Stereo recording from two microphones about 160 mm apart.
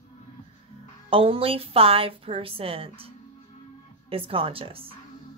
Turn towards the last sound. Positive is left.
turn(degrees=-35)  # may be behind; listen again after turning